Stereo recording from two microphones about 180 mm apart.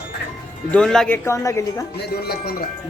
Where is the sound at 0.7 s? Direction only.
5° left (ahead or behind).